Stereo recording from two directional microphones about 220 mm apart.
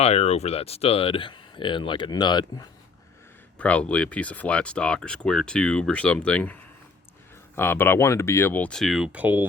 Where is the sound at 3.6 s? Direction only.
5° left (ahead or behind).